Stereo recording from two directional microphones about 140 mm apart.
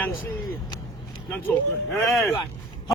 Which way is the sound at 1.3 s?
10° left (ahead or behind).